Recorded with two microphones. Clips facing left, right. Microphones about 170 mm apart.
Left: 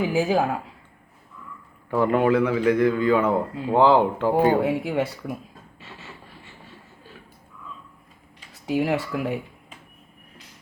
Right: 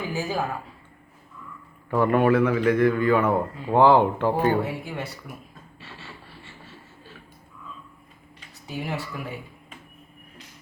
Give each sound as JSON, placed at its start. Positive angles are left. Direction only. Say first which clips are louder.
{"t": 0.1, "sound": "speech", "louder": "left 4 dB", "side_deg": 90}
{"t": 1.9, "sound": "a man's voice", "louder": "even", "side_deg": 15}
{"t": 4.6, "sound": "speech", "louder": "left 8 dB", "side_deg": 90}
{"t": 5.8, "sound": "a sound", "louder": "even", "side_deg": 15}
{"t": 8.6, "sound": "speech", "louder": "left 8 dB", "side_deg": 90}